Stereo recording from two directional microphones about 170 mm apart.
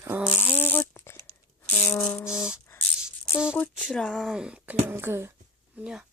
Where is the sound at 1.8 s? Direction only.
Centre (ahead or behind).